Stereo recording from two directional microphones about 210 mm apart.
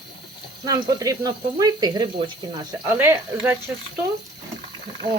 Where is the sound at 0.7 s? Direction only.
15° right (ahead or behind).